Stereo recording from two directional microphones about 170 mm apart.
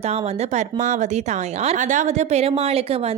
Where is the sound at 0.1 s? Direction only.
45° right (ahead or behind).